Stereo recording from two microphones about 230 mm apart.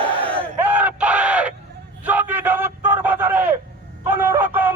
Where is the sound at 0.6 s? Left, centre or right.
Centre.